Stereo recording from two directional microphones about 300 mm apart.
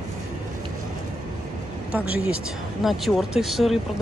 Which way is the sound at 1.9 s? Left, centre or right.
Centre.